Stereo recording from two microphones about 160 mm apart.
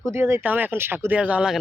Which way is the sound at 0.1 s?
15° right (ahead or behind).